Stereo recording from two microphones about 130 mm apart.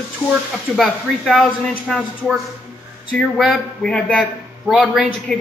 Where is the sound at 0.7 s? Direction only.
Centre (ahead or behind).